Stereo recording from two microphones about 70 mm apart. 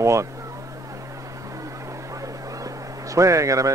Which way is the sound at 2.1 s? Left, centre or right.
Right.